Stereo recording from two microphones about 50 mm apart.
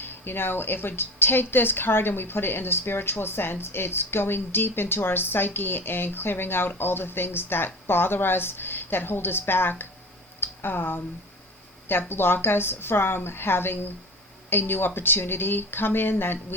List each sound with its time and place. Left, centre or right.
0.0 s a woman's voice: left